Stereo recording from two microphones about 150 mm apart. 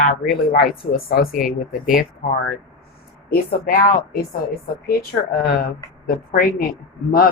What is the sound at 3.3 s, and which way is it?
Speech, 80° left.